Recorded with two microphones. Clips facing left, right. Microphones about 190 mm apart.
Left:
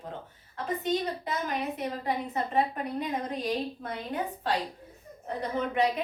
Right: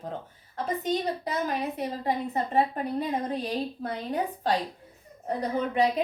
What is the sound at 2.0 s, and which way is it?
A woman's voice, 35° right (ahead or behind).